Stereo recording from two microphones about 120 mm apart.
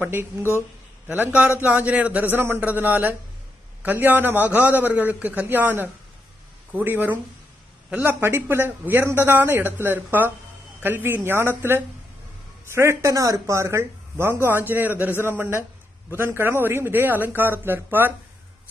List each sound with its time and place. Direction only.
0.0 s a man's voice: 20° right (ahead or behind)